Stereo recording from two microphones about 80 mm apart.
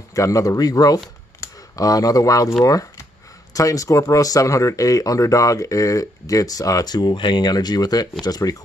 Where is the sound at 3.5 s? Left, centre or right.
Left.